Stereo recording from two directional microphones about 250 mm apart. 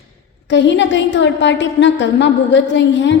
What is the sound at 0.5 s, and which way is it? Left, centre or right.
A woman's voice, left.